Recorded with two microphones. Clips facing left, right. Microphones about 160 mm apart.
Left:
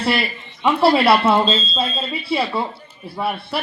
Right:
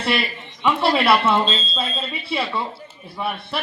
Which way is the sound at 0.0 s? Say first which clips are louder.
Left 2 dB; 35° left (ahead or behind).